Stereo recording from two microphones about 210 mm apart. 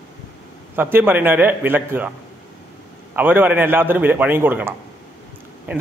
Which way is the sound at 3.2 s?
10° right (ahead or behind).